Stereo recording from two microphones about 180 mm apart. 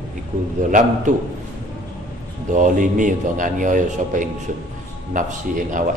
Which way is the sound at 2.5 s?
45° right (ahead or behind).